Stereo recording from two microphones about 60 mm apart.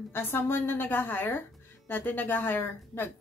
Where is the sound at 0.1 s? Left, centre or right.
Left.